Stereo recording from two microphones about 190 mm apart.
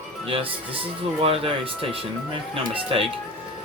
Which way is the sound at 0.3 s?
30° right (ahead or behind).